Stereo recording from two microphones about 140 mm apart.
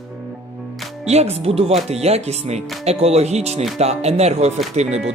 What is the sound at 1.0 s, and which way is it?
Speech, 50° right (ahead or behind).